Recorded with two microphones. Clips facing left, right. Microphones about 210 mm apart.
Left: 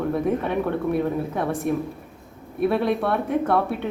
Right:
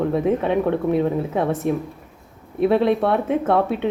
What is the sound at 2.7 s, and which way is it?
Speech, 25° right (ahead or behind).